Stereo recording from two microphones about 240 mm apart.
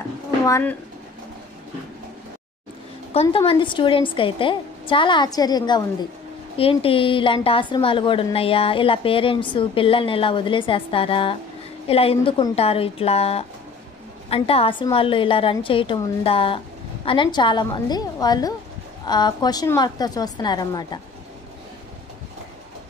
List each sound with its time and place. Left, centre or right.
0.5 s a woman's voice: centre
3.1 s a woman's voice: left